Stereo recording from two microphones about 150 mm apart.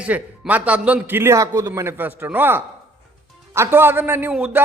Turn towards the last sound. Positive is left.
turn(degrees=-10)  # may be behind; listen again after turning